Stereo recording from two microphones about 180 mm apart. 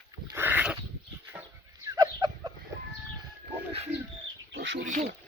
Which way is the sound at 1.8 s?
20° right (ahead or behind).